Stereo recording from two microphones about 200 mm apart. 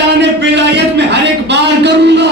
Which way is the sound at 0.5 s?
60° right (ahead or behind).